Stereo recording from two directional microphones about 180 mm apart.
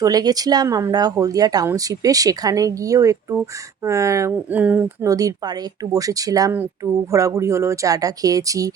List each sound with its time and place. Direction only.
0.0 s speech: 20° right (ahead or behind)
5.0 s speech: 20° right (ahead or behind)